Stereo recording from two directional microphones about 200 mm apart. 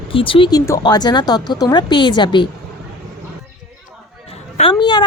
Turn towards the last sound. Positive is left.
turn(degrees=20)  # may be behind; listen again after turning